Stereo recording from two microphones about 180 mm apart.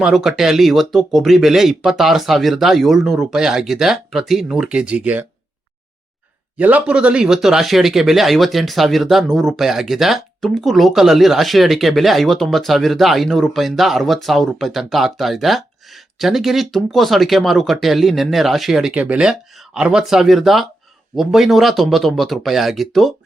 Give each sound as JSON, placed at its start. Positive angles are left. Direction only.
{"t": 0.0, "sound": "speech", "side_deg": 0}
{"t": 6.6, "sound": "speech", "side_deg": -10}